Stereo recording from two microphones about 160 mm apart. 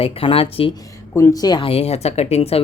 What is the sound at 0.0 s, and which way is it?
Speech, 35° left (ahead or behind).